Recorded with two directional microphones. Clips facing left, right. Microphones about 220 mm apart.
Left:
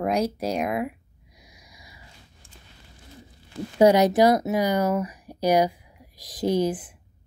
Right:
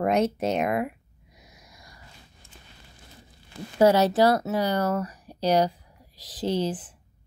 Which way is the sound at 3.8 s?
15° left (ahead or behind).